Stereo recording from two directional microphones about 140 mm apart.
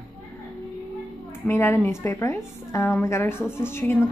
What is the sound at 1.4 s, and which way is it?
A woman's voice, 20° left (ahead or behind).